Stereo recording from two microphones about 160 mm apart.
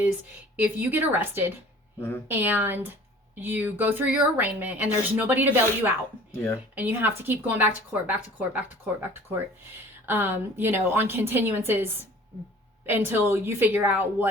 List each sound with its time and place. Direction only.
0.5 s a woman's voice: 10° right (ahead or behind)
2.0 s speech: 15° left (ahead or behind)
2.2 s a woman's voice: 10° right (ahead or behind)
6.3 s speech: 15° left (ahead or behind)
6.7 s a woman's voice: 10° right (ahead or behind)